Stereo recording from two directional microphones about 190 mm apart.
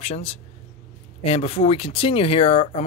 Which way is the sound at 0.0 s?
30° left (ahead or behind).